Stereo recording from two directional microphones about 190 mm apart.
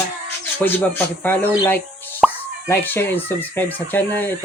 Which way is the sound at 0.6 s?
10° left (ahead or behind).